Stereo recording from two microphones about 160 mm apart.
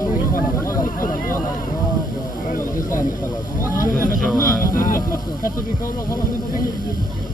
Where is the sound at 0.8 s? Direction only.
60° left (ahead or behind).